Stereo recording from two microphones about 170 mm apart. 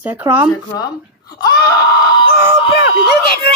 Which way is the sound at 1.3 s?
20° left (ahead or behind).